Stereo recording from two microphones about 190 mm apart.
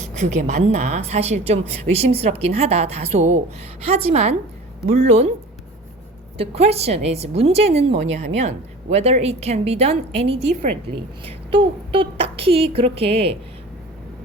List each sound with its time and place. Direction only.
0.1 s a woman's voice: 40° right (ahead or behind)
6.3 s a woman's voice: 30° right (ahead or behind)